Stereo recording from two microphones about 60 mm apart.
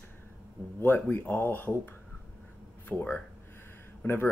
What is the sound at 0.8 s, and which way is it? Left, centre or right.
Speech, left.